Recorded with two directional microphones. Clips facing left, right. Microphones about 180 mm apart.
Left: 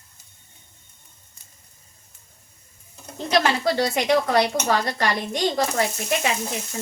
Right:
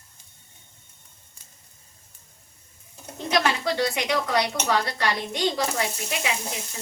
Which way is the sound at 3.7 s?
45° left (ahead or behind).